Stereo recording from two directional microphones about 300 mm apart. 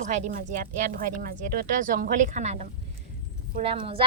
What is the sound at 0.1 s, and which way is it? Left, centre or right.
A woman's voice, right.